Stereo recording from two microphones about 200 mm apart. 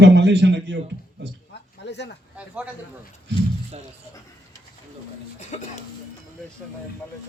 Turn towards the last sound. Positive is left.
turn(degrees=35)  # may be behind; listen again after turning